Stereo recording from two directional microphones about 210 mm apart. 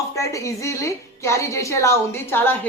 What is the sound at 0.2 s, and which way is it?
Speech, 15° left (ahead or behind).